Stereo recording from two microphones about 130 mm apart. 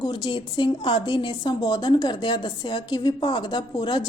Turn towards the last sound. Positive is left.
turn(degrees=35)  # may be behind; listen again after turning